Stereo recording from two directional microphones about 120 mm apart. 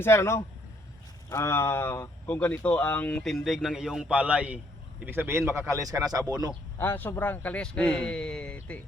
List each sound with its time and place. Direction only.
0.0 s speech: 20° left (ahead or behind)
3.2 s a man's voice: centre (ahead or behind); by 6.5 s 30° right (ahead or behind)
6.7 s speech: 15° left (ahead or behind)